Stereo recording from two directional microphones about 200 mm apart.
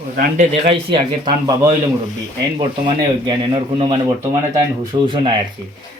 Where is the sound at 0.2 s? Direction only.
35° right (ahead or behind).